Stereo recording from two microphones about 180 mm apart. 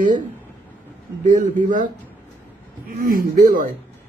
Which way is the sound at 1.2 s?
45° right (ahead or behind).